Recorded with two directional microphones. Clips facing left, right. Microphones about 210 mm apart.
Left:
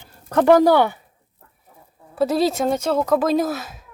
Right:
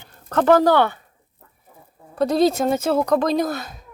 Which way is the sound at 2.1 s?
5° left (ahead or behind).